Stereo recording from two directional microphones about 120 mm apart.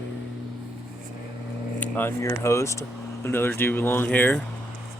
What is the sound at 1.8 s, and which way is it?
Speech, 15° left (ahead or behind).